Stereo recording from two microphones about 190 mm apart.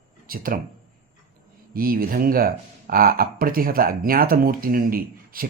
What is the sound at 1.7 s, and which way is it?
Speech, 50° right (ahead or behind).